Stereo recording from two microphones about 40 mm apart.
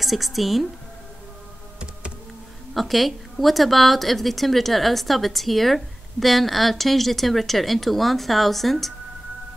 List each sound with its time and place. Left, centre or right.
0.0 s a woman's voice: centre
2.7 s a woman's voice: centre